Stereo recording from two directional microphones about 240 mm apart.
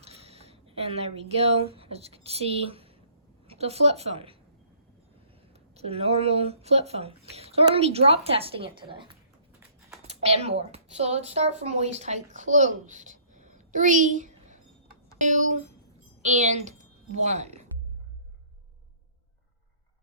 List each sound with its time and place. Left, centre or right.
0.0 s a sound: right
1.7 s a woman's voice: right
5.5 s a child's voice: right